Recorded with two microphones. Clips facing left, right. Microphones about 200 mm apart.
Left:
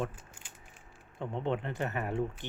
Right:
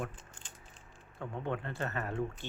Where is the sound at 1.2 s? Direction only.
20° left (ahead or behind).